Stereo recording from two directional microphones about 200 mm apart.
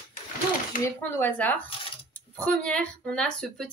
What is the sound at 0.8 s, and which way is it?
Speech, 10° left (ahead or behind).